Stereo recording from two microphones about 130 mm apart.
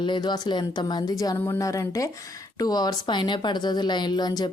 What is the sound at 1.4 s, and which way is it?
A woman's voice, 20° left (ahead or behind).